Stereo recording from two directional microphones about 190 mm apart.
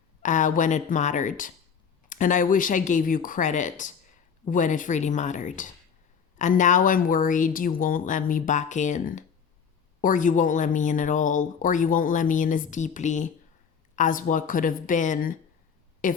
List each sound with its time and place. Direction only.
0.2 s speech: 40° left (ahead or behind)